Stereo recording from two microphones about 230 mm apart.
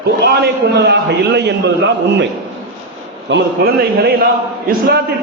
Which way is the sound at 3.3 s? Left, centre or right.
Right.